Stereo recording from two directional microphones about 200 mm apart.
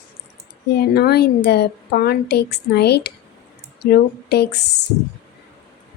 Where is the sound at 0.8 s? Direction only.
55° left (ahead or behind).